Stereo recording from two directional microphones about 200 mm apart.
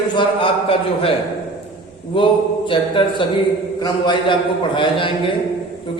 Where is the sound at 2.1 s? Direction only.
25° left (ahead or behind).